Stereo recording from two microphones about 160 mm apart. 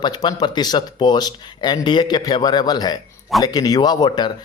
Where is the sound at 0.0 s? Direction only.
25° left (ahead or behind).